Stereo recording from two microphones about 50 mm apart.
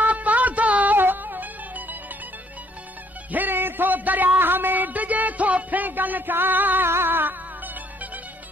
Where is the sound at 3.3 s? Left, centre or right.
Right.